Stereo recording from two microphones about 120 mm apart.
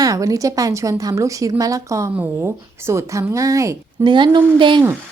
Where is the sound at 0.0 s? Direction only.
30° right (ahead or behind).